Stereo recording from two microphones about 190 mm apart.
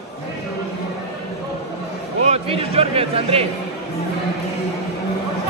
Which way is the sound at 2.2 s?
35° right (ahead or behind).